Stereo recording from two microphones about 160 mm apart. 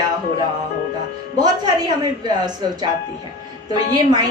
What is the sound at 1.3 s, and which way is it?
Speech, 25° right (ahead or behind).